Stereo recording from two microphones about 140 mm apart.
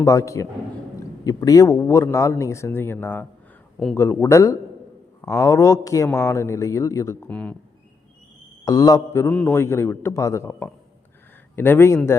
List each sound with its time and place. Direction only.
0.0 s speech: 20° left (ahead or behind)
7.3 s a man's voice: 10° left (ahead or behind)
8.6 s a man's voice: 25° left (ahead or behind)